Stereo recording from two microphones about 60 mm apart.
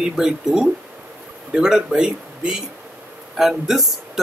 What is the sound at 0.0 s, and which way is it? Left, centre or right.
Speech, centre.